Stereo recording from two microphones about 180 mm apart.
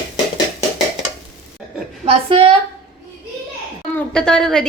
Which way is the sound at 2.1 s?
30° right (ahead or behind).